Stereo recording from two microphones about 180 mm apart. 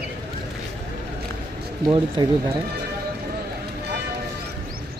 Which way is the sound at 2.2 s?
25° right (ahead or behind).